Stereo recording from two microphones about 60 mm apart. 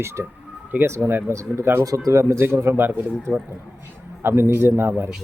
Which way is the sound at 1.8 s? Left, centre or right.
Right.